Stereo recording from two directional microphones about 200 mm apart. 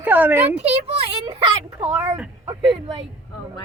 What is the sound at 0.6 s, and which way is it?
Speech, 30° right (ahead or behind).